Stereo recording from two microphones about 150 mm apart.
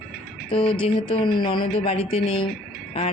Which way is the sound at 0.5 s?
35° left (ahead or behind).